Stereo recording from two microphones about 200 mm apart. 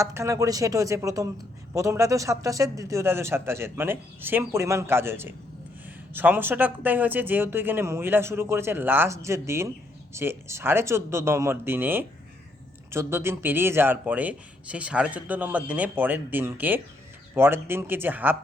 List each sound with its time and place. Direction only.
0.0 s speech: 15° right (ahead or behind)